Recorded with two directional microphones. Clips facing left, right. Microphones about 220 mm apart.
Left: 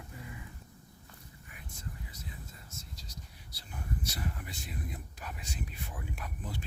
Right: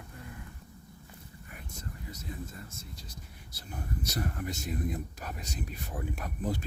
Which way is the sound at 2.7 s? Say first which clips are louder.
Right 2 dB; 55° right (ahead or behind).